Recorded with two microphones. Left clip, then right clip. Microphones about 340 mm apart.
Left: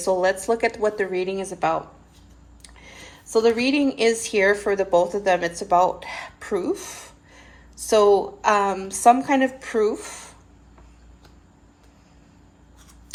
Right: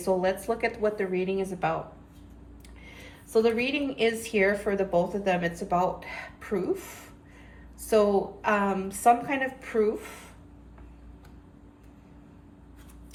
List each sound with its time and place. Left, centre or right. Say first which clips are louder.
0.0 s speech: left 6 dB; left
2.8 s speech: left 5 dB; left